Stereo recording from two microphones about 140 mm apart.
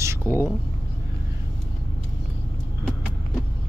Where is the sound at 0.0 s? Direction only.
20° right (ahead or behind).